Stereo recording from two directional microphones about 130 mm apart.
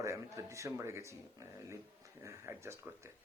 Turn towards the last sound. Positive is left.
turn(degrees=-20)  # may be behind; listen again after turning